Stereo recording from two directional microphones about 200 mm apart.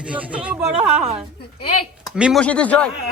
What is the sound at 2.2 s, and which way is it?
Speech, centre (ahead or behind).